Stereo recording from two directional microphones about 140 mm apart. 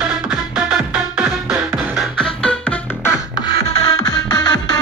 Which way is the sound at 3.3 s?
40° left (ahead or behind).